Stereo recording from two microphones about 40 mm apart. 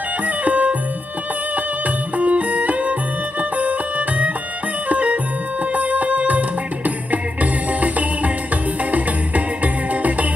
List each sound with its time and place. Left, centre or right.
0.2 s music: right